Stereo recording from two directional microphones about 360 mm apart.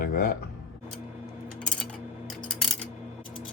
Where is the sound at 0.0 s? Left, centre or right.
Left.